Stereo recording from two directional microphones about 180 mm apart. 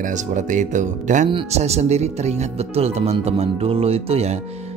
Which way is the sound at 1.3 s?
30° right (ahead or behind).